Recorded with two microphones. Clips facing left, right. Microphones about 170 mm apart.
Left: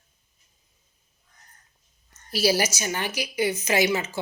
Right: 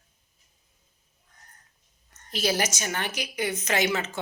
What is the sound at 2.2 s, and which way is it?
A woman's voice, 10° left (ahead or behind).